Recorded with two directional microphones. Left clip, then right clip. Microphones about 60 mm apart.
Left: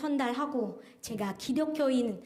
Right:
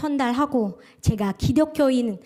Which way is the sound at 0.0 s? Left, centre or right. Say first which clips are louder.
Right 8 dB; right.